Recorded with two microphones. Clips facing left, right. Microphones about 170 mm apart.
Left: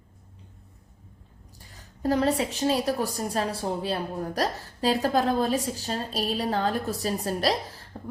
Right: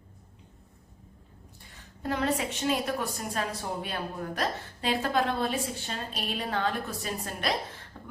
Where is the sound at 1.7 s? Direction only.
35° left (ahead or behind).